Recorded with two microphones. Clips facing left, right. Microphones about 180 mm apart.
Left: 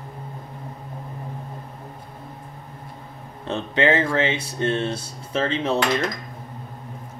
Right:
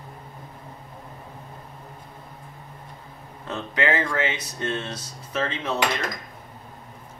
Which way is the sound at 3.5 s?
25° left (ahead or behind).